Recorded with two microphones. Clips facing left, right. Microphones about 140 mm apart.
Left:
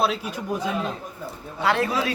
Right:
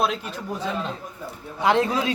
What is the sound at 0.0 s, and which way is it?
Speech, 5° left (ahead or behind).